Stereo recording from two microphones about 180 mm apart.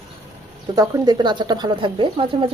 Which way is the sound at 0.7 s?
20° right (ahead or behind).